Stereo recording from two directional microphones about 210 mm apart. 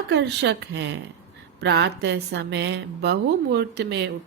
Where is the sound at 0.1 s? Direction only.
50° right (ahead or behind).